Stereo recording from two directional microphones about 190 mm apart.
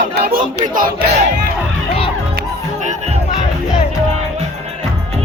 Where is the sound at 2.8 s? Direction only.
40° right (ahead or behind).